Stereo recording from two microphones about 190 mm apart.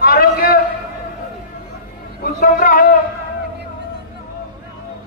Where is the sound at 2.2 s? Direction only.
50° left (ahead or behind).